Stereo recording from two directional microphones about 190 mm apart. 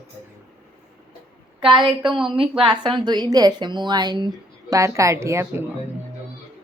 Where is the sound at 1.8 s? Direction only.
25° right (ahead or behind).